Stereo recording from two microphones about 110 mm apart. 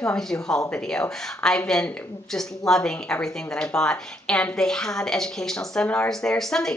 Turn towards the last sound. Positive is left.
turn(degrees=5)  # may be behind; listen again after turning